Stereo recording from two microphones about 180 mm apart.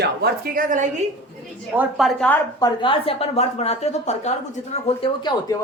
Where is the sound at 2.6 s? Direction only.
25° left (ahead or behind).